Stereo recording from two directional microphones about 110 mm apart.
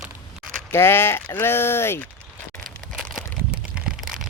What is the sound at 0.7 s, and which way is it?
Speech, 20° left (ahead or behind).